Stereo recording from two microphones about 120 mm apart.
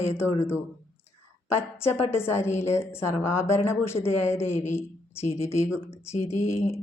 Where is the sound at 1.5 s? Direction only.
20° left (ahead or behind).